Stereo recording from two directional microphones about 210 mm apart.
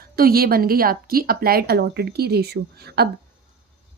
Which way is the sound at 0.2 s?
45° right (ahead or behind).